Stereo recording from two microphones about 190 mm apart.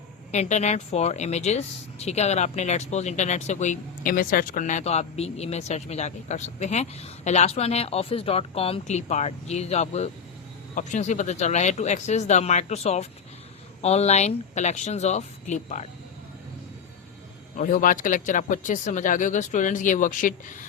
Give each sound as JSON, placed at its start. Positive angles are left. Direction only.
{"t": 0.3, "sound": "speech", "side_deg": 35}
{"t": 17.6, "sound": "speech", "side_deg": 45}